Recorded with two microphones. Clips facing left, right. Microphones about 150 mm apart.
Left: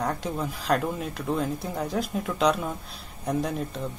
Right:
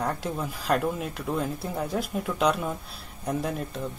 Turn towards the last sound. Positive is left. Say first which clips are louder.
# left 2 dB
turn(degrees=0)  # may be behind; listen again after turning